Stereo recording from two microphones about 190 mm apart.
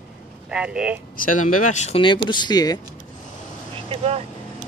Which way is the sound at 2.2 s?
25° left (ahead or behind).